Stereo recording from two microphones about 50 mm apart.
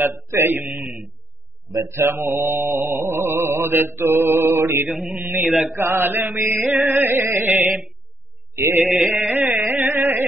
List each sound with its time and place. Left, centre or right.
0.0 s mantra: right
2.0 s mantra: right
6.7 s music: right
8.5 s mantra: right
9.1 s music: right
9.6 s carnatic music: right